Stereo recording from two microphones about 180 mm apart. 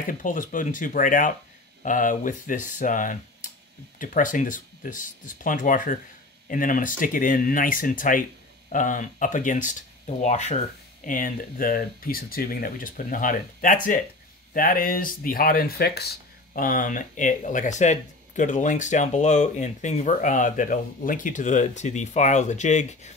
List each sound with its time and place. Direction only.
0.0 s speech: 50° left (ahead or behind)
16.5 s speech: 50° left (ahead or behind)